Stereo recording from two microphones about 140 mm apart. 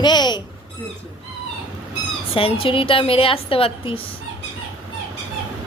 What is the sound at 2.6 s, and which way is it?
A woman's voice, 40° left (ahead or behind).